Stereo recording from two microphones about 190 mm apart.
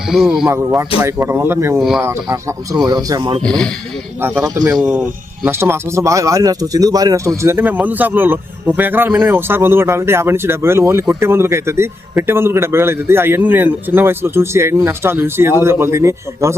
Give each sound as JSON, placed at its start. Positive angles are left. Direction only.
{"t": 0.1, "sound": "speech", "side_deg": 0}
{"t": 0.5, "sound": "speech", "side_deg": -15}
{"t": 3.4, "sound": "speech", "side_deg": 5}
{"t": 4.2, "sound": "speech", "side_deg": -15}
{"t": 4.9, "sound": "speech", "side_deg": -5}